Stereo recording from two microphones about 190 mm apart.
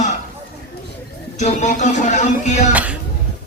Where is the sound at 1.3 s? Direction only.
40° left (ahead or behind).